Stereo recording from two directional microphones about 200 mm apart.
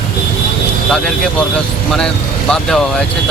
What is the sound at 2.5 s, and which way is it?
Speech, 5° left (ahead or behind).